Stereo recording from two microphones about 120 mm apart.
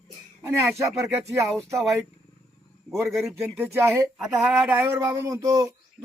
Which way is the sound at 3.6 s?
20° right (ahead or behind).